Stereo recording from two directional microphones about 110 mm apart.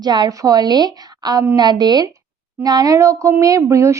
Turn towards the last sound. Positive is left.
turn(degrees=-30)  # may be behind; listen again after turning